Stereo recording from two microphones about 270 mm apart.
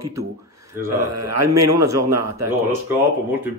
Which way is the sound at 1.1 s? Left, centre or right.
Right.